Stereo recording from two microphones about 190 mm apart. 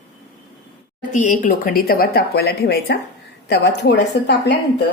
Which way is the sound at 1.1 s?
45° left (ahead or behind).